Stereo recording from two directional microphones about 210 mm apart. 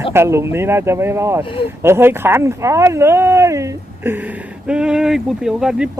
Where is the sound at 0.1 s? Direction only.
10° right (ahead or behind).